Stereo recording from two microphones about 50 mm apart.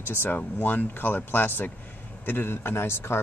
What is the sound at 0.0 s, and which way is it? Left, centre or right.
Speech, left.